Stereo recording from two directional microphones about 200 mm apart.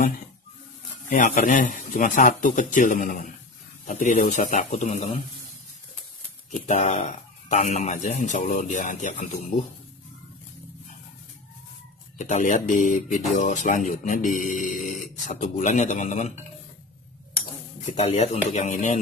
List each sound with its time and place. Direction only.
1.1 s speech: 40° left (ahead or behind)
6.6 s speech: 35° left (ahead or behind)
12.2 s speech: 35° left (ahead or behind)
17.9 s speech: 30° left (ahead or behind)